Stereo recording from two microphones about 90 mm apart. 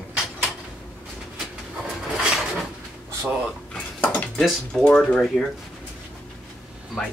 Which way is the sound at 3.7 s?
10° left (ahead or behind).